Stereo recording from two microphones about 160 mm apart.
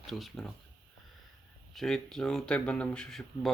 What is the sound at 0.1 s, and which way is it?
Speech, centre (ahead or behind).